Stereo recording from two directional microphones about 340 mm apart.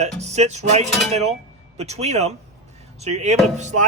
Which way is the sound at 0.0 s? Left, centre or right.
Centre.